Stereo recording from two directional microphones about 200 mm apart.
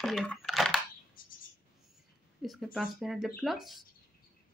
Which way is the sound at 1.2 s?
45° left (ahead or behind).